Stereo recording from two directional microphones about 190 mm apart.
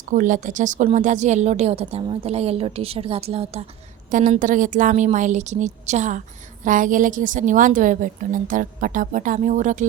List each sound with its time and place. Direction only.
0.1 s a woman's voice: 45° right (ahead or behind)
4.1 s a woman's voice: 40° right (ahead or behind)